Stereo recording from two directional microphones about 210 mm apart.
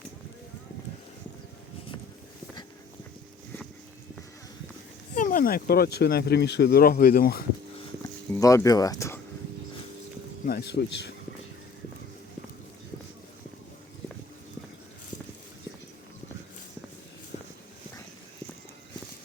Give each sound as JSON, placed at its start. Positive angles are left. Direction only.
{"t": 5.1, "sound": "speech", "side_deg": 40}
{"t": 8.3, "sound": "speech", "side_deg": 15}
{"t": 10.4, "sound": "speech", "side_deg": 50}
{"t": 17.3, "sound": "a sound", "side_deg": 30}